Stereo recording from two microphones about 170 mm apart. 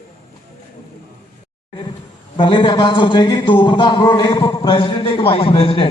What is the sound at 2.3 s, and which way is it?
A man's voice, 30° left (ahead or behind).